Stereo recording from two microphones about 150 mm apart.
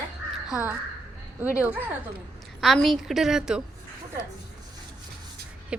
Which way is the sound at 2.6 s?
Centre (ahead or behind).